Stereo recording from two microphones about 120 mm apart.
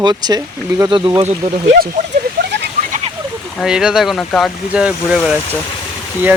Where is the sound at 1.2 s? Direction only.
75° right (ahead or behind).